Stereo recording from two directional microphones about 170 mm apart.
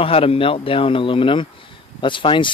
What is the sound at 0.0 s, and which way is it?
Speech, 35° left (ahead or behind).